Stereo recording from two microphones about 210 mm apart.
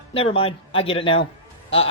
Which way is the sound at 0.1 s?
25° left (ahead or behind).